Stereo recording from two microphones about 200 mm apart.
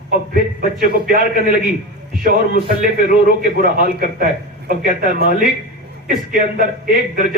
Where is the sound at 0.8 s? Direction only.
45° right (ahead or behind).